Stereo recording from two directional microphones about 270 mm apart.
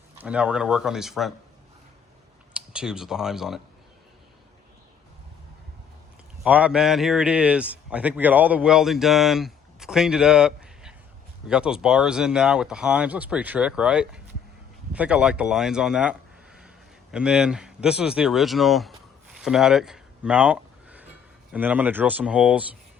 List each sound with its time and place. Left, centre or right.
0.2 s a man's voice: centre
2.5 s speech: centre
6.4 s a man's voice: centre
19.4 s a sound: centre
21.5 s a man's voice: centre